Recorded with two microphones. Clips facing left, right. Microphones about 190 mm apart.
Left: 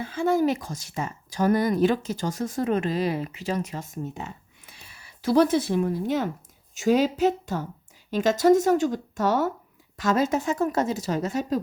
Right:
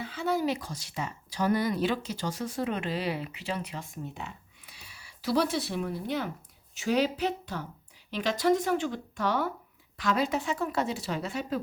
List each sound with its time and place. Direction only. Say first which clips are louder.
0.0 s speech: left 6 dB; 50° left (ahead or behind)